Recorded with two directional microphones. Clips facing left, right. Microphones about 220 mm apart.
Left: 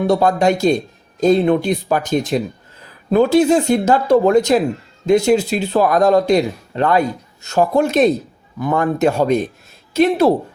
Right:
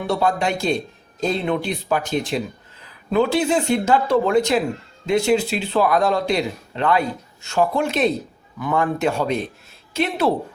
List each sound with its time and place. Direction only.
0.1 s a man's voice: 45° left (ahead or behind)